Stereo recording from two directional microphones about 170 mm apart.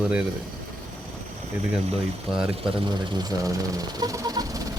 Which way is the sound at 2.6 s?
25° right (ahead or behind).